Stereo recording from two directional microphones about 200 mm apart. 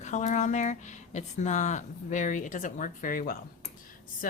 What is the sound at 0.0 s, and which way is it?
Speech, 35° left (ahead or behind).